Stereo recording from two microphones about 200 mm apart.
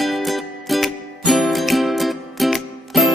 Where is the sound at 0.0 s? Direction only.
Centre (ahead or behind).